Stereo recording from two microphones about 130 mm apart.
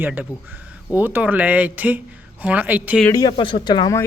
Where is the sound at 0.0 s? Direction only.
10° right (ahead or behind).